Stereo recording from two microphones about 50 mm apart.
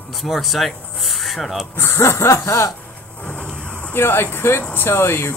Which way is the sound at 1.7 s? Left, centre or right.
Left.